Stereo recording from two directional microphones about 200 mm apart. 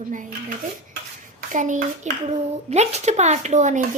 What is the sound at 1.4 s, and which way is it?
Hands, 40° right (ahead or behind).